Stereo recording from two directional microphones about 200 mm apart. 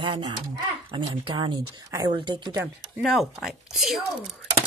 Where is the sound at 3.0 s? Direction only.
Centre (ahead or behind).